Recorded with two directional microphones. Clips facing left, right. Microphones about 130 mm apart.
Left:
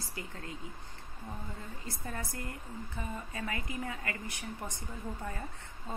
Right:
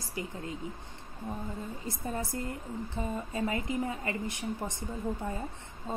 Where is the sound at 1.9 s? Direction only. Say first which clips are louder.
Right 5 dB; 20° right (ahead or behind).